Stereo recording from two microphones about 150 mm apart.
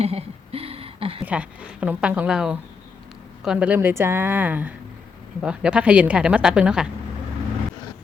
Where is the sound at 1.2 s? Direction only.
10° right (ahead or behind).